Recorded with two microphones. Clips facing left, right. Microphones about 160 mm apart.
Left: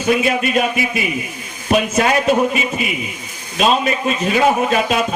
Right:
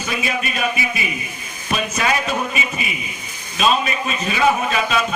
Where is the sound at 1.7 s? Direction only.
50° left (ahead or behind).